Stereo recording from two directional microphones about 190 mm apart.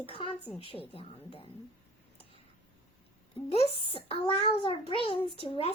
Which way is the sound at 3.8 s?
30° left (ahead or behind).